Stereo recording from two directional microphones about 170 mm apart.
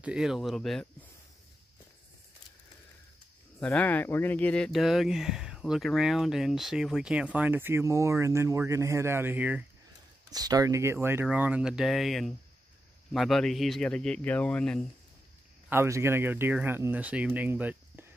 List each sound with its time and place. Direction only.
0.0 s speech: 5° right (ahead or behind)
3.5 s speech: 10° left (ahead or behind); by 9.7 s 10° right (ahead or behind)
10.3 s speech: 20° right (ahead or behind); by 14.8 s 5° left (ahead or behind)
15.7 s speech: 15° right (ahead or behind)